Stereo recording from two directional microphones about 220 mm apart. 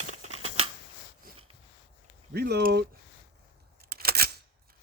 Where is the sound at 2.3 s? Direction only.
45° right (ahead or behind).